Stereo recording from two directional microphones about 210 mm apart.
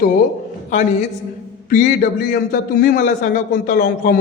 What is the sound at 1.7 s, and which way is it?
A man's voice, 40° left (ahead or behind).